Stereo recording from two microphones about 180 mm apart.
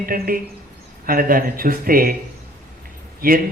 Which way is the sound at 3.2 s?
55° right (ahead or behind).